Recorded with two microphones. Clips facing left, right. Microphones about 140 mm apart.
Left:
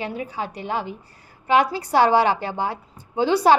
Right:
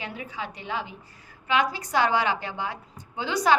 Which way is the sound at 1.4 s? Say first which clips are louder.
Left 6 dB; 35° left (ahead or behind).